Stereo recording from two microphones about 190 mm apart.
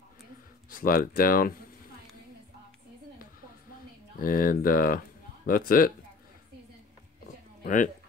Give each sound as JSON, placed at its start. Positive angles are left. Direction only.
{"t": 0.7, "sound": "speech", "side_deg": 50}
{"t": 4.2, "sound": "speech", "side_deg": 50}
{"t": 7.6, "sound": "speech", "side_deg": 45}